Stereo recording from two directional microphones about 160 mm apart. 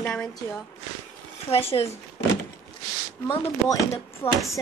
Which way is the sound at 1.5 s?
35° left (ahead or behind).